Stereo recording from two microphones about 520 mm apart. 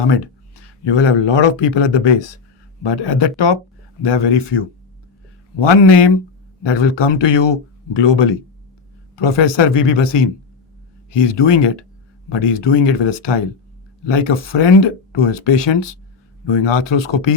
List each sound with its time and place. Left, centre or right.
0.9 s speech: left